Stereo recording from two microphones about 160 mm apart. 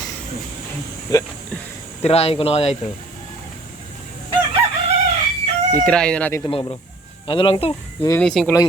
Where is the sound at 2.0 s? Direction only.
40° left (ahead or behind).